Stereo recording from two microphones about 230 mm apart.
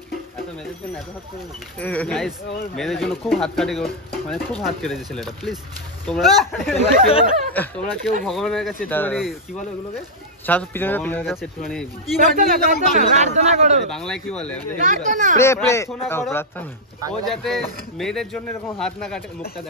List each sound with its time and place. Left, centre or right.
1.8 s speech: centre
7.1 s speech: left
7.5 s speech: centre
10.4 s speech: centre
12.2 s a man's voice: right
13.8 s speech: centre
14.8 s a man's voice: right
15.3 s speech: centre